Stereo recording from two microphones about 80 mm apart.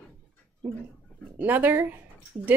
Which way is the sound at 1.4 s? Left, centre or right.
Right.